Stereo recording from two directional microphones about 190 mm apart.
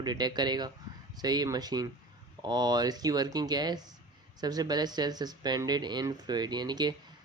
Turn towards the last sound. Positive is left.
turn(degrees=-20)  # may be behind; listen again after turning